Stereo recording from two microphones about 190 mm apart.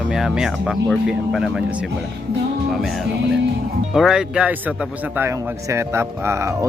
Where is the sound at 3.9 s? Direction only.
Centre (ahead or behind).